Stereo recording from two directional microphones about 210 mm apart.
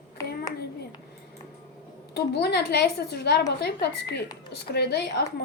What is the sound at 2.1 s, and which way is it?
Speech, 50° left (ahead or behind).